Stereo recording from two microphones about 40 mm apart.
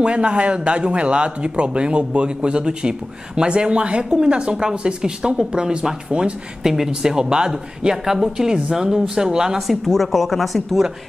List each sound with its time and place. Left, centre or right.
0.0 s speech: right
6.6 s speech: centre
9.8 s speech: centre